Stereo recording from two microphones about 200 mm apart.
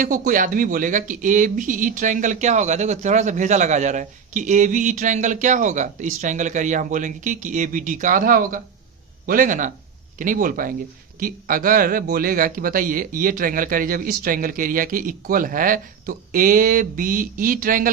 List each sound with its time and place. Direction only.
0.0 s speech: 40° right (ahead or behind)